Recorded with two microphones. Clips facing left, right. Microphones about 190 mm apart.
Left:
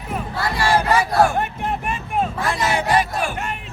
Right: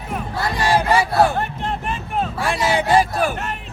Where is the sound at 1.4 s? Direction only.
10° left (ahead or behind).